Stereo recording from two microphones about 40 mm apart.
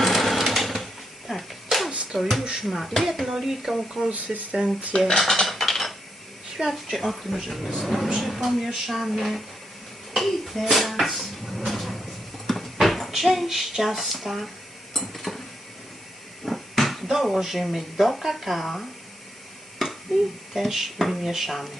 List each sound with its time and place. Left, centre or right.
0.0 s sewing machine: centre
1.3 s a sound: centre
2.1 s speech: centre
2.4 s speech: centre
2.6 s speech: centre
4.9 s speech: centre
5.2 s typing: centre
6.7 s speech: centre
10.2 s dishes: centre
12.7 s speech: centre
14.9 s a sound: centre
16.5 s speech: centre
19.8 s a sound: centre
20.5 s speech: centre